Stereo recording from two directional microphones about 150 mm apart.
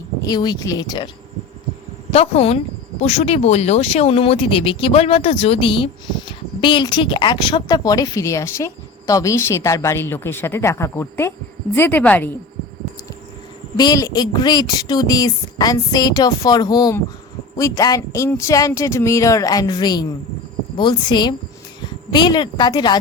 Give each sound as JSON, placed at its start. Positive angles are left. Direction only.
{"t": 0.2, "sound": "speech", "side_deg": 25}
{"t": 2.0, "sound": "speech", "side_deg": 40}
{"t": 13.7, "sound": "speech", "side_deg": 25}